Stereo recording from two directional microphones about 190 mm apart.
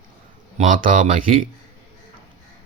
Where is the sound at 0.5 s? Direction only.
45° right (ahead or behind).